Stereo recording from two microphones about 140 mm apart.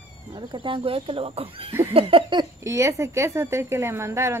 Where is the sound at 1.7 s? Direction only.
15° right (ahead or behind).